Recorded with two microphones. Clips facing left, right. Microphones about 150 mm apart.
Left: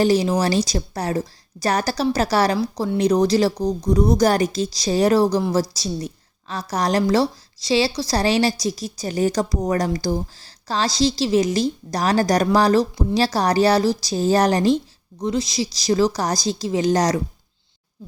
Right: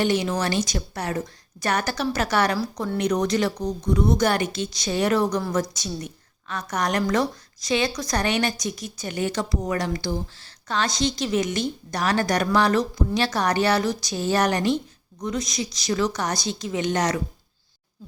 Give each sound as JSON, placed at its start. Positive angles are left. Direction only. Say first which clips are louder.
{"t": 0.0, "sound": "a woman's voice", "louder": "left 5 dB", "side_deg": 35}